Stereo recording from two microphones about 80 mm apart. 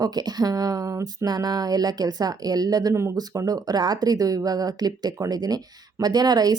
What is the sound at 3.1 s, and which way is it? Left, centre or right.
Speech, right.